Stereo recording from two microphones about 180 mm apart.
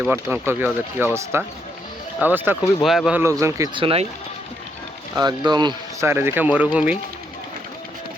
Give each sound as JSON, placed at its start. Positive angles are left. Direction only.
{"t": 0.0, "sound": "speech", "side_deg": -10}
{"t": 3.2, "sound": "speech", "side_deg": -15}
{"t": 5.1, "sound": "speech", "side_deg": -25}